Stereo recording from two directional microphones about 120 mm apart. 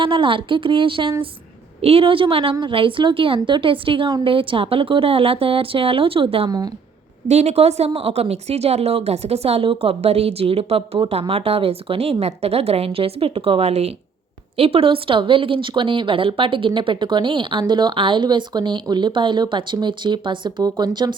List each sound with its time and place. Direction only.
0.0 s a woman's voice: 45° right (ahead or behind)
6.5 s speech: 30° right (ahead or behind)
7.3 s a woman's voice: 65° right (ahead or behind); by 21.2 s 35° right (ahead or behind)